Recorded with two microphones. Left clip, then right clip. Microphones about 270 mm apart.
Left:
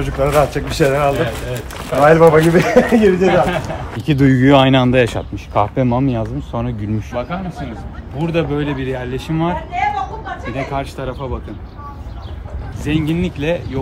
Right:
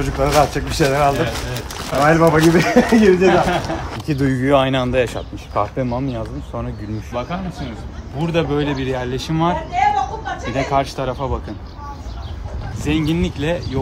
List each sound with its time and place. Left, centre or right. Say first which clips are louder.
0.0 s speech: left 1 dB; centre
4.1 s speech: left 4 dB; left
7.1 s speech: even; centre
9.6 s a man's voice: right 2 dB; right
12.8 s speech: even; centre